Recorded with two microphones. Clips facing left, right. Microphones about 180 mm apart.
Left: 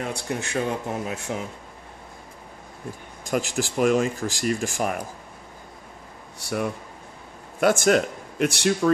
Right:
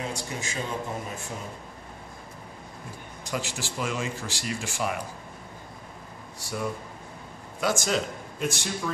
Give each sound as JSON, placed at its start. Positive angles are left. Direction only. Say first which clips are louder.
{"t": 0.0, "sound": "speech", "louder": "left 4 dB", "side_deg": 60}
{"t": 3.3, "sound": "speech", "louder": "left 8 dB", "side_deg": 45}
{"t": 7.6, "sound": "speech", "louder": "left 8 dB", "side_deg": 60}